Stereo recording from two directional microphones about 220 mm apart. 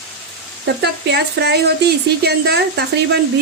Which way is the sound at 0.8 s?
50° right (ahead or behind).